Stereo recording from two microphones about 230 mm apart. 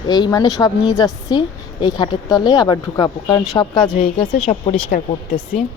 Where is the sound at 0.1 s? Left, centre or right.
Centre.